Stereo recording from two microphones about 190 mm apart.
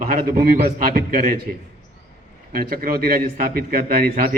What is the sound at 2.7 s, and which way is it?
A man's voice, 50° right (ahead or behind).